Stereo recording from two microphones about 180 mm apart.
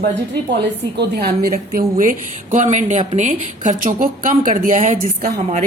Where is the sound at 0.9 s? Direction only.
65° right (ahead or behind).